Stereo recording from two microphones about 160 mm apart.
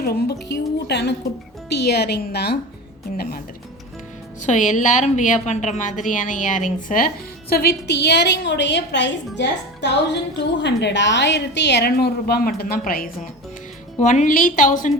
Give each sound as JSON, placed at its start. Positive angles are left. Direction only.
{"t": 0.0, "sound": "a woman's voice", "side_deg": 80}
{"t": 3.2, "sound": "speech", "side_deg": 65}
{"t": 4.4, "sound": "a woman's voice", "side_deg": 50}
{"t": 7.5, "sound": "a woman's voice", "side_deg": 80}
{"t": 14.0, "sound": "a woman's voice", "side_deg": 50}